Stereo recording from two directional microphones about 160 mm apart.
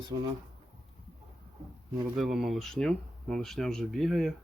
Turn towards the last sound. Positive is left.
turn(degrees=0)  # may be behind; listen again after turning